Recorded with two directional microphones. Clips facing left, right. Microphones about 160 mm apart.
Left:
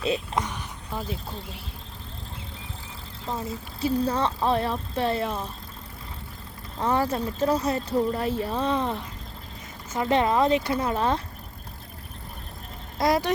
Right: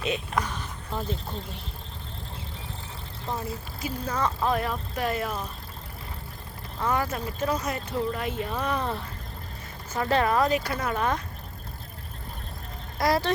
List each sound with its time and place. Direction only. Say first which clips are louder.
0.3 s speech: even; 15° left (ahead or behind)
3.8 s speech: left 6 dB; 30° left (ahead or behind)
6.7 s speech: left 3 dB; 30° left (ahead or behind)
13.0 s speech: left 1 dB; 20° left (ahead or behind)